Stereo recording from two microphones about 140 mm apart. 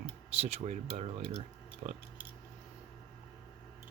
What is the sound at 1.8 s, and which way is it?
Speech, 70° right (ahead or behind).